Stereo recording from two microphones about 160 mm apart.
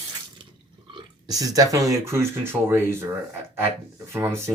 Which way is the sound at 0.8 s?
25° right (ahead or behind).